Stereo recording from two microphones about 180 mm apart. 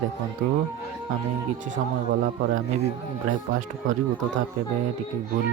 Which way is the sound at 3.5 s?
45° right (ahead or behind).